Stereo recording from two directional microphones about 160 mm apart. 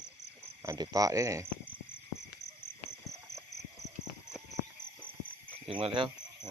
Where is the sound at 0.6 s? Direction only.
20° right (ahead or behind).